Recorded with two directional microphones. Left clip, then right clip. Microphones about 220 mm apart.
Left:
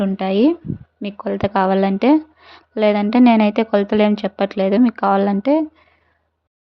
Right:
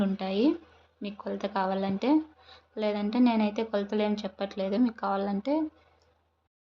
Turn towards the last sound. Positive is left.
turn(degrees=40)  # may be behind; listen again after turning